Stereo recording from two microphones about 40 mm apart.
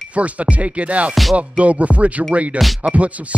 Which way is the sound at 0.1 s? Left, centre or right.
Right.